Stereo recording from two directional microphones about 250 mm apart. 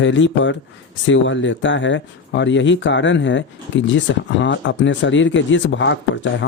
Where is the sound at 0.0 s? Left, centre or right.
Left.